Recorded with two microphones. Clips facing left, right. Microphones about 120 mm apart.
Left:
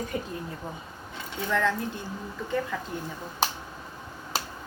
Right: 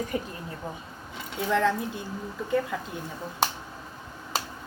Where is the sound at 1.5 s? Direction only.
15° right (ahead or behind).